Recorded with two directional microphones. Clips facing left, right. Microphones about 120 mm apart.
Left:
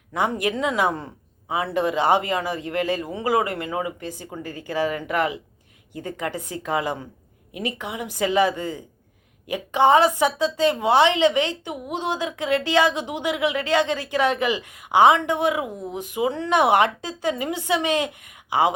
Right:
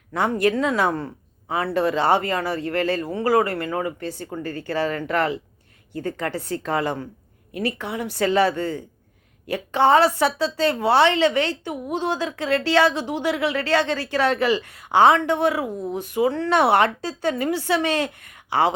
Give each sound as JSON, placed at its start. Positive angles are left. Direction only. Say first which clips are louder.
{"t": 0.1, "sound": "a woman's voice", "louder": "right 3 dB", "side_deg": 15}